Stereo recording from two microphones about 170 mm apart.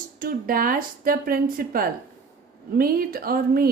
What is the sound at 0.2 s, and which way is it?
Speech, 55° right (ahead or behind).